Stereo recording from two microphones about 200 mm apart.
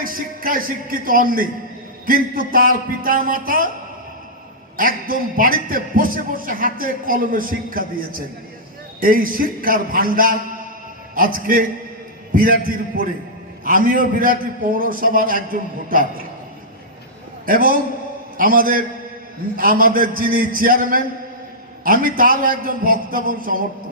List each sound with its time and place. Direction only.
0.0 s a man's voice: 45° right (ahead or behind)
4.8 s a man's voice: 45° right (ahead or behind)
17.4 s a man's voice: 45° right (ahead or behind)